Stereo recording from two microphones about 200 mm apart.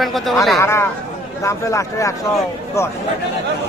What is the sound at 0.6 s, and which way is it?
A man's voice, 15° left (ahead or behind).